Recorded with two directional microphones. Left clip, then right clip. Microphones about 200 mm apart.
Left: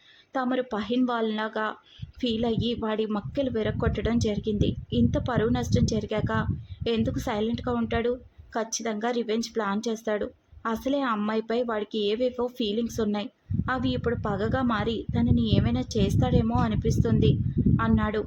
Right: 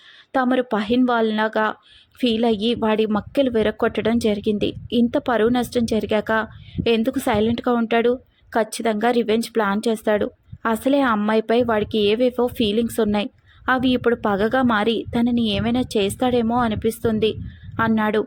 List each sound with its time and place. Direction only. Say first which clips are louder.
0.3 s a woman's voice: right 8 dB; 25° right (ahead or behind)